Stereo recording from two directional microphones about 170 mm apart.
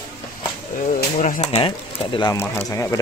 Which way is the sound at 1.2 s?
45° left (ahead or behind).